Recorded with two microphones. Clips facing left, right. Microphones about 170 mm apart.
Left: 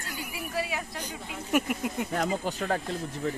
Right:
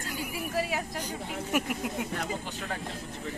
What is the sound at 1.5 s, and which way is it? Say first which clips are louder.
Speech: left 4 dB; centre (ahead or behind).